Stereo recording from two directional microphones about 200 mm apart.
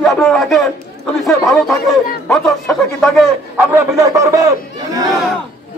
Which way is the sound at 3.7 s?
15° right (ahead or behind).